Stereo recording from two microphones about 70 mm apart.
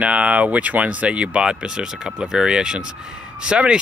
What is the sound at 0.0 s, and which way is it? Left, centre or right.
Speech, centre.